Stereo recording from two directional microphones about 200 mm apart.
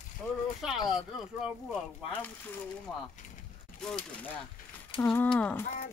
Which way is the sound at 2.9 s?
5° left (ahead or behind).